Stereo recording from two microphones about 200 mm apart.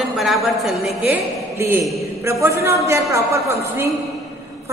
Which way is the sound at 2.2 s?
15° right (ahead or behind).